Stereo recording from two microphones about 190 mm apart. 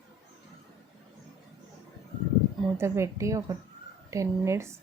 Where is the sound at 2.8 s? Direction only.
15° right (ahead or behind).